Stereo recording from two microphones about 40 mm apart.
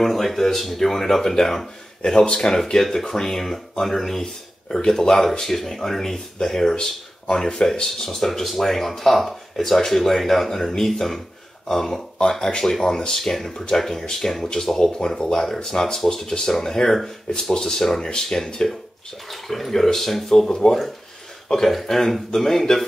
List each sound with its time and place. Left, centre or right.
0.0 s speech: centre
2.6 s speech: centre
12.2 s speech: left; by 14.5 s centre
14.5 s speech: centre
15.3 s speech: centre
19.3 s speech: centre